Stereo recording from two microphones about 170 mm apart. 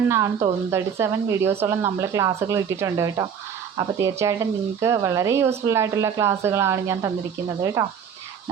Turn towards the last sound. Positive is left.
turn(degrees=-20)  # may be behind; listen again after turning